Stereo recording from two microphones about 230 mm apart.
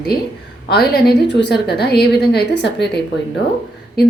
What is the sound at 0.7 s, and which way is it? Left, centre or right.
A woman's voice, left.